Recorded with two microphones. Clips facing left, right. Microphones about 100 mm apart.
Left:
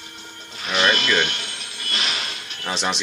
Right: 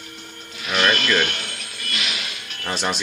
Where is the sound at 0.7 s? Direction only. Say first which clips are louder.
Even; centre (ahead or behind).